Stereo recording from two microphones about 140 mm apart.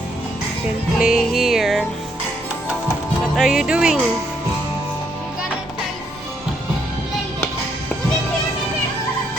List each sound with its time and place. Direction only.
0.9 s music: 5° right (ahead or behind)
3.3 s music: 5° right (ahead or behind)